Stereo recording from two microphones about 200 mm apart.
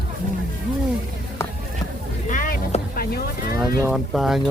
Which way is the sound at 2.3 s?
40° left (ahead or behind).